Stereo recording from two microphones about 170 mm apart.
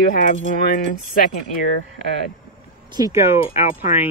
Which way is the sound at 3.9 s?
45° left (ahead or behind).